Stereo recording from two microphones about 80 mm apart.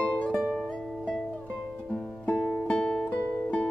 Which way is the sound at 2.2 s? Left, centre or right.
Centre.